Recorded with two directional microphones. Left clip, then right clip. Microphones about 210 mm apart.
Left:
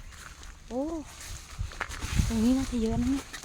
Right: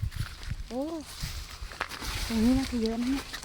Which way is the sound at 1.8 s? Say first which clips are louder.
Right 1 dB; 40° right (ahead or behind).